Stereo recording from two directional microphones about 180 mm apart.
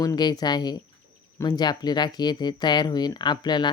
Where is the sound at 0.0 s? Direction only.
20° left (ahead or behind).